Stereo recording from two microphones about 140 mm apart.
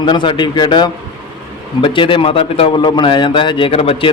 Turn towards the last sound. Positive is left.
turn(degrees=45)  # may be behind; listen again after turning